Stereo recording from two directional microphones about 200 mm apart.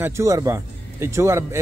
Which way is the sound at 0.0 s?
15° right (ahead or behind).